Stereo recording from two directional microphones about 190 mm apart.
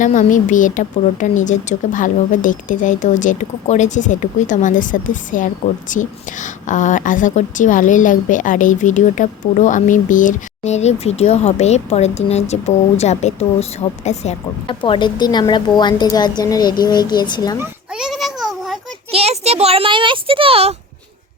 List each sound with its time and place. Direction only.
0.0 s a woman's voice: 40° left (ahead or behind); by 17.6 s 20° left (ahead or behind)
17.6 s babbling: 5° right (ahead or behind)
19.1 s a child's voice: 35° right (ahead or behind)